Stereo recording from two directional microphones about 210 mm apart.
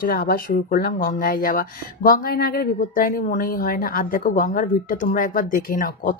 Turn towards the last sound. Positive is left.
turn(degrees=40)  # may be behind; listen again after turning